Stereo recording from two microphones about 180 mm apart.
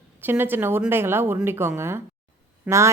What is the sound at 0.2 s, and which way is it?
Speech, 10° right (ahead or behind).